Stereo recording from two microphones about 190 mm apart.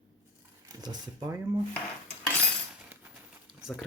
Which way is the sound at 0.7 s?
20° right (ahead or behind).